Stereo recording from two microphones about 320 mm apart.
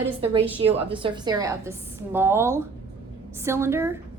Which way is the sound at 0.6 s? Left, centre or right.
Centre.